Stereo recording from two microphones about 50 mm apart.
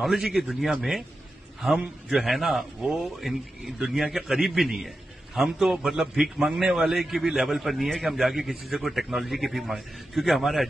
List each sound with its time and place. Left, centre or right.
0.0 s a man's voice: centre
2.0 s a man's voice: centre